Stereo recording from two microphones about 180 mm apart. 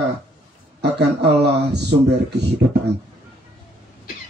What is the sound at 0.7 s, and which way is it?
A man's voice, 65° right (ahead or behind).